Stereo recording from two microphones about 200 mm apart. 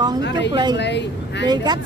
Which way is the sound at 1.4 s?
20° right (ahead or behind).